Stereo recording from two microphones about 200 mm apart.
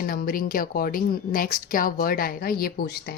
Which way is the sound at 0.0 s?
45° left (ahead or behind).